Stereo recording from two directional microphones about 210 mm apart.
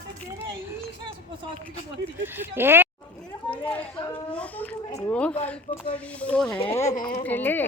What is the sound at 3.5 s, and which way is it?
A child's voice, 5° left (ahead or behind).